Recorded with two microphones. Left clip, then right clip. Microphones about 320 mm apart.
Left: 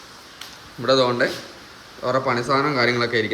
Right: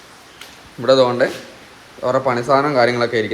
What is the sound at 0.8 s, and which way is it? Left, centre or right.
Speech, centre.